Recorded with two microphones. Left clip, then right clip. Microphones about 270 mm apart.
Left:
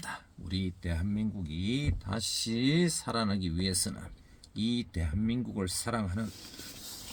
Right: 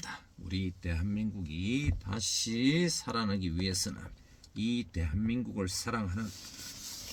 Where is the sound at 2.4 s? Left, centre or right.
Centre.